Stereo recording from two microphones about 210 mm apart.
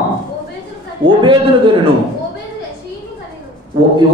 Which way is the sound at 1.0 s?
25° right (ahead or behind).